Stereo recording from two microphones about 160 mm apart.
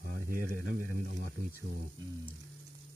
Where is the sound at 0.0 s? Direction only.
60° right (ahead or behind).